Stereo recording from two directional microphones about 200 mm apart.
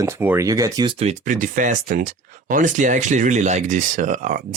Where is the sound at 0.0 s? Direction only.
10° right (ahead or behind).